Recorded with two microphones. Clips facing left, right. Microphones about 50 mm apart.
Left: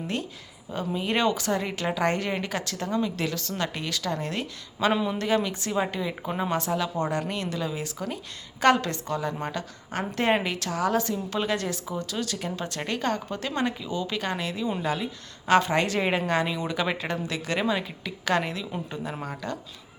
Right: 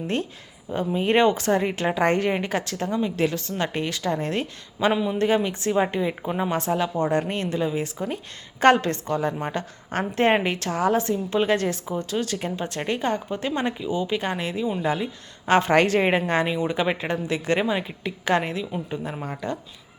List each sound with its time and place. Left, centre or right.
0.9 s speech: right
4.9 s speech: centre
5.1 s speech: right
15.7 s a woman's voice: right
16.0 s speech: right